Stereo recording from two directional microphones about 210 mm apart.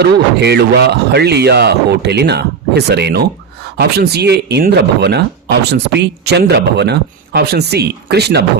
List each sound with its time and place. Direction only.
0.0 s speech: 55° right (ahead or behind)